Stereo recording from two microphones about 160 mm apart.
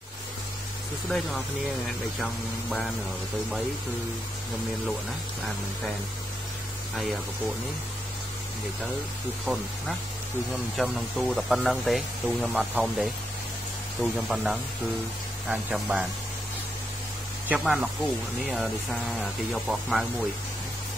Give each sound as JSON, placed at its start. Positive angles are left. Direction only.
{"t": 1.0, "sound": "speech", "side_deg": 0}
{"t": 7.0, "sound": "speech", "side_deg": 0}
{"t": 10.5, "sound": "speech", "side_deg": 0}
{"t": 14.1, "sound": "speech", "side_deg": 0}
{"t": 17.5, "sound": "speech", "side_deg": -5}